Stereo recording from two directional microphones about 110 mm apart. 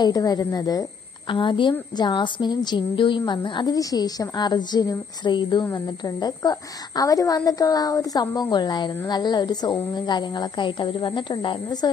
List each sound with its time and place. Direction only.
0.0 s a woman's voice: 35° left (ahead or behind)
1.3 s a woman's voice: 50° left (ahead or behind)